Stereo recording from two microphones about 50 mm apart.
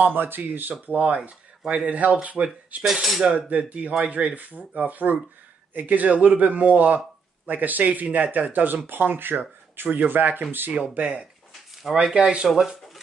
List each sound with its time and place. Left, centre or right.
0.0 s speech: right
1.9 s cutlery: right
2.8 s cutlery: centre
3.3 s cutlery: right
4.7 s speech: right
11.0 s cutlery: right
12.4 s speech: centre